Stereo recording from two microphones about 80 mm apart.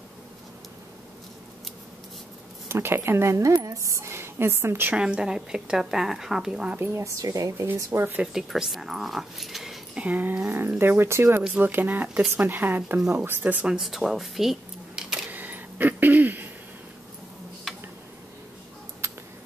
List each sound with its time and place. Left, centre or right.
2.7 s a woman's voice: right
4.9 s speech: centre
6.7 s a woman's voice: right
7.2 s speech: right
7.7 s a woman's voice: right
8.2 s speech: centre
9.9 s speech: centre
10.8 s a woman's voice: right
11.5 s speech: right
13.7 s speech: centre
15.2 s a sound: right
17.7 s tick: centre